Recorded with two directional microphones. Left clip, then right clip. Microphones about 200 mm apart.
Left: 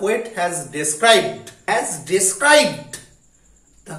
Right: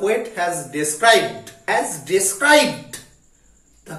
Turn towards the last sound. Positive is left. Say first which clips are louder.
# left 1 dB
turn(degrees=5)  # may be behind; listen again after turning